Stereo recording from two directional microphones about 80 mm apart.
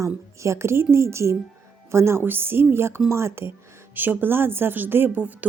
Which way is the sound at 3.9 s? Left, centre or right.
Right.